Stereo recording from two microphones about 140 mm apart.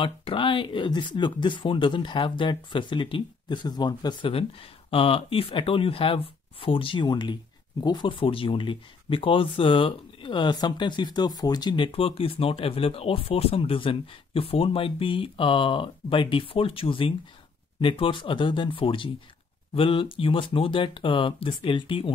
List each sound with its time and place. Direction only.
0.0 s speech: 40° left (ahead or behind)